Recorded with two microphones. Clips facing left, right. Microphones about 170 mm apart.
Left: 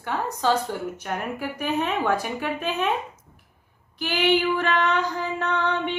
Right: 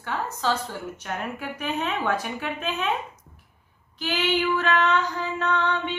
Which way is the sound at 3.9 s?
10° left (ahead or behind).